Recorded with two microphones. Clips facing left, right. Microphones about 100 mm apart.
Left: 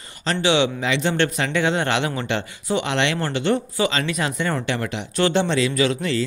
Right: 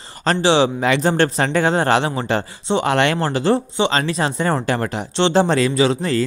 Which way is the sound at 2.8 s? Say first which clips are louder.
Right 5 dB; 45° right (ahead or behind).